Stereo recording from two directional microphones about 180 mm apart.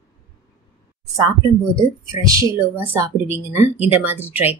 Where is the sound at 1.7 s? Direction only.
20° right (ahead or behind).